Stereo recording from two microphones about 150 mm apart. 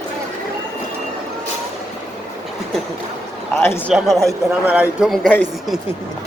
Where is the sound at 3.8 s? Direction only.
Centre (ahead or behind).